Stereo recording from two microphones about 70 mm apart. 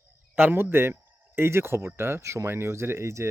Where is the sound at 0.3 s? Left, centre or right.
Right.